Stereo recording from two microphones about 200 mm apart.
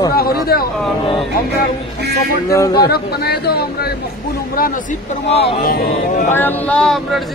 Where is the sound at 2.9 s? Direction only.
50° left (ahead or behind).